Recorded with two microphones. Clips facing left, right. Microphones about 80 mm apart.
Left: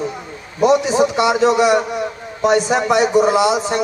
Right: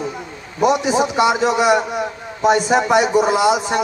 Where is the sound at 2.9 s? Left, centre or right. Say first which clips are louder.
Left 3 dB; right.